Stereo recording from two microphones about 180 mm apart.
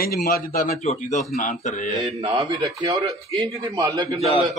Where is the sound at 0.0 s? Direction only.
55° left (ahead or behind).